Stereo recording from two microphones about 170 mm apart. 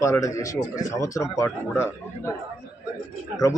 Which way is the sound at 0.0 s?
20° left (ahead or behind).